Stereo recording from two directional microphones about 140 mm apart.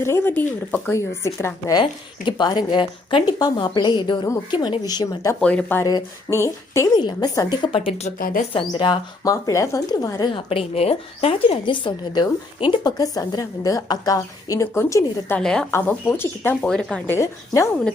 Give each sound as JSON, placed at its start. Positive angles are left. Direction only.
{"t": 0.0, "sound": "a woman's voice", "side_deg": 15}
{"t": 1.7, "sound": "a woman's voice", "side_deg": 35}
{"t": 5.4, "sound": "a woman's voice", "side_deg": 10}
{"t": 5.8, "sound": "a woman's voice", "side_deg": 20}
{"t": 7.0, "sound": "a woman's voice", "side_deg": 30}
{"t": 8.2, "sound": "speech", "side_deg": 90}
{"t": 8.5, "sound": "a woman's voice", "side_deg": 35}
{"t": 10.5, "sound": "a woman's voice", "side_deg": 45}
{"t": 15.4, "sound": "a woman's voice", "side_deg": 5}
{"t": 15.7, "sound": "a woman's voice", "side_deg": 15}
{"t": 17.2, "sound": "a woman's voice", "side_deg": 20}